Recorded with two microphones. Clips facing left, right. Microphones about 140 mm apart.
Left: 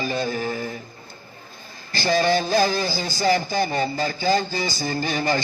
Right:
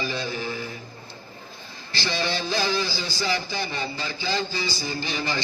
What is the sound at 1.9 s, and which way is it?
Speech, 45° left (ahead or behind).